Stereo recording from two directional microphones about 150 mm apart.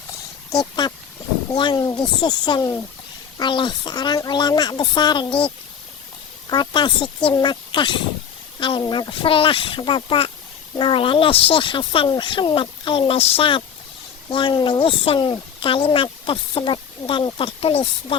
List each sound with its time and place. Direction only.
0.5 s speech: 25° left (ahead or behind)
6.5 s speech: 30° left (ahead or behind)